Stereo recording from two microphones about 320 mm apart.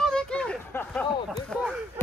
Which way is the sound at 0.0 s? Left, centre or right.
Centre.